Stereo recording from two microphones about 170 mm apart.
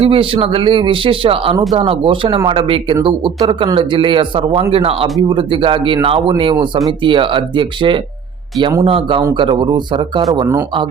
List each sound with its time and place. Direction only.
0.0 s speech: 30° right (ahead or behind)